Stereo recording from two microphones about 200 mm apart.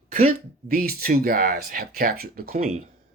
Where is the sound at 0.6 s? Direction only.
50° right (ahead or behind).